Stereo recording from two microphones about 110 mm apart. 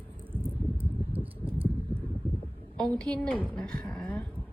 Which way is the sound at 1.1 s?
60° right (ahead or behind).